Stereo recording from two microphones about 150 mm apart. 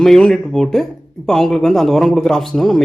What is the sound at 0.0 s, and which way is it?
Speech, 5° left (ahead or behind).